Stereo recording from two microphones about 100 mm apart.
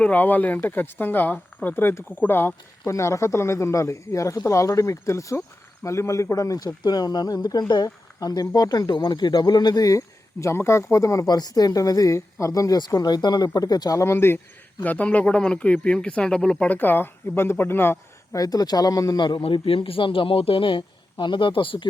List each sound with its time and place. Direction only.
0.0 s speech: 15° left (ahead or behind); by 10.0 s 40° left (ahead or behind)
10.4 s speech: 25° left (ahead or behind)
14.0 s speech: 25° left (ahead or behind)
18.3 s speech: 40° left (ahead or behind)
19.4 s a man's voice: 65° left (ahead or behind)